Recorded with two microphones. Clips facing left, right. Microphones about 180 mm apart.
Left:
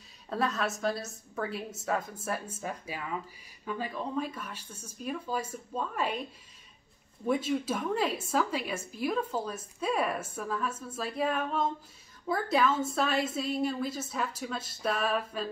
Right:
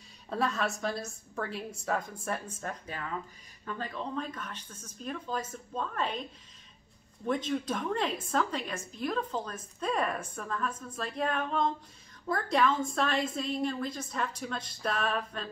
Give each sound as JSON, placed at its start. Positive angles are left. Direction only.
{"t": 0.3, "sound": "a woman's voice", "side_deg": 0}
{"t": 7.2, "sound": "a woman's voice", "side_deg": 5}